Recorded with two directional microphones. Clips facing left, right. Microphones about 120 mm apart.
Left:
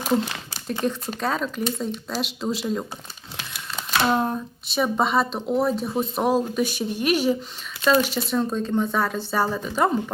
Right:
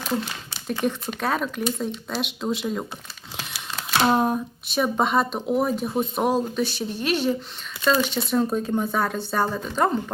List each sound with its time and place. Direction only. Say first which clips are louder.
0.7 s speech: even; 5° right (ahead or behind)
3.3 s crumpling: even; 5° right (ahead or behind)
4.0 s speech: right 2 dB; 15° right (ahead or behind)
4.7 s speech: even; centre (ahead or behind)
6.7 s a woman's voice: left 2 dB; 10° left (ahead or behind)